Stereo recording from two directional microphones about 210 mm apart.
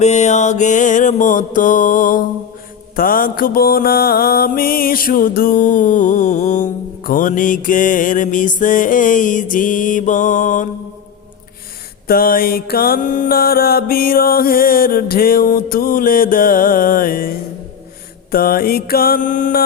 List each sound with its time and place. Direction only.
0.0 s mantra: 30° left (ahead or behind)
12.0 s mantra: 45° left (ahead or behind)